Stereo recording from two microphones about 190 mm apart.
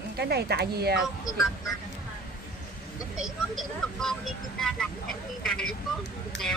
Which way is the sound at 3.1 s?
Centre (ahead or behind).